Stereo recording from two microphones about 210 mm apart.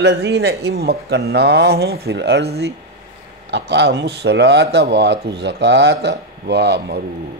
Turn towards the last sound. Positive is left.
turn(degrees=-55)  # may be behind; listen again after turning